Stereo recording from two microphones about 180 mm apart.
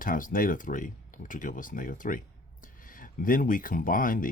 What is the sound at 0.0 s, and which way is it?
Speech, 50° left (ahead or behind).